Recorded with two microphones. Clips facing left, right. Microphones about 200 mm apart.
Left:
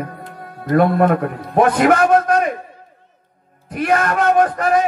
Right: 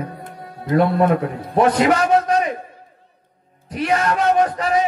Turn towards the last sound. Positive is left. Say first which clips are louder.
# left 2 dB
turn(degrees=55)  # may be behind; listen again after turning